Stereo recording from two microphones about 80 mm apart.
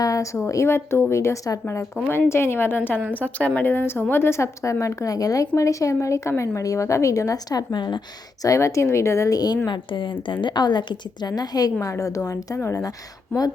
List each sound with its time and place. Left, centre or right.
0.0 s a woman's voice: left
7.7 s a woman's voice: left
8.4 s a woman's voice: left
9.6 s a woman's voice: left
10.4 s a woman's voice: left
13.3 s a woman's voice: left